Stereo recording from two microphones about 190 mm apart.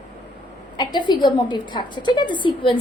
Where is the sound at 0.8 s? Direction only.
25° left (ahead or behind).